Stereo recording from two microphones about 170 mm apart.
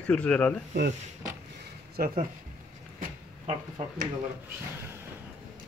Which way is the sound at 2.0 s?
55° right (ahead or behind).